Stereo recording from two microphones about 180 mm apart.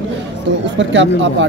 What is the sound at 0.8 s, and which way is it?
Speech, 90° right.